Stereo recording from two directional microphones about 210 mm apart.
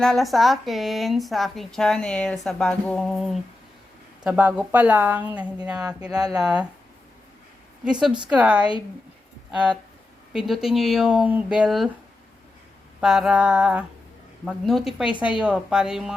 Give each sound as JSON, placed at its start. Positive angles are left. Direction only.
{"t": 0.0, "sound": "a woman's voice", "side_deg": 0}
{"t": 6.1, "sound": "a woman's voice", "side_deg": -20}
{"t": 6.4, "sound": "speech", "side_deg": -5}
{"t": 8.3, "sound": "speech", "side_deg": -5}
{"t": 13.0, "sound": "speech", "side_deg": 0}